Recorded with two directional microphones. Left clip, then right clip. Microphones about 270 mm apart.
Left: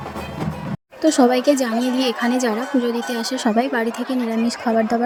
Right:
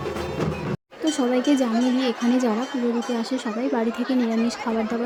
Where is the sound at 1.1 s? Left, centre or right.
Left.